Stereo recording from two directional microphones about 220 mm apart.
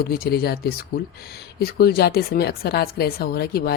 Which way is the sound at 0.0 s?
45° left (ahead or behind).